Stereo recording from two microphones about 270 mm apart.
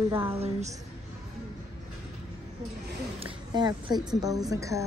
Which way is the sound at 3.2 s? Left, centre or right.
Centre.